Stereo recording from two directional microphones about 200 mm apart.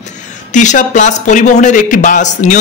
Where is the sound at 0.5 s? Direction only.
40° left (ahead or behind).